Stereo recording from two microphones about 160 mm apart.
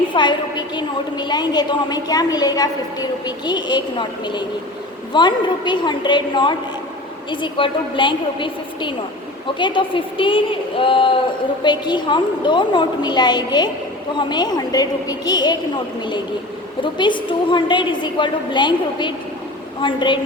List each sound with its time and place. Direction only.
0.1 s a woman's voice: 30° left (ahead or behind)
16.8 s a woman's voice: 30° left (ahead or behind)